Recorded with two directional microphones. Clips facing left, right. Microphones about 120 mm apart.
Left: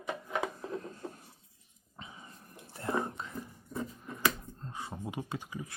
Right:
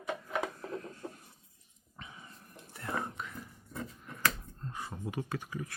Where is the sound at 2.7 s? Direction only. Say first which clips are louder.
Left 4 dB; 25° left (ahead or behind).